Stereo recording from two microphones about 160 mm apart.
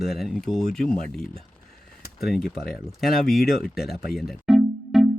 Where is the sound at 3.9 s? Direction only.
75° left (ahead or behind).